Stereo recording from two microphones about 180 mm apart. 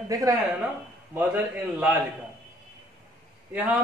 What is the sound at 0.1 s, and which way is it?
A man's voice, 20° right (ahead or behind).